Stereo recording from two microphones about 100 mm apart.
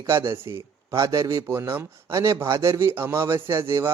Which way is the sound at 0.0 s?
25° right (ahead or behind).